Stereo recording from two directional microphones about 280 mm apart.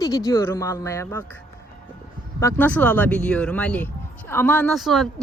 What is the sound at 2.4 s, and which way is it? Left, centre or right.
Speech, centre.